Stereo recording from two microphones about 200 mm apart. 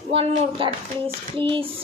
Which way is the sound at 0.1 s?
30° right (ahead or behind).